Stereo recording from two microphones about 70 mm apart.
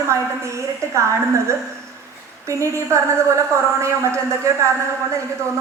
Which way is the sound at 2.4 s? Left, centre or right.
Right.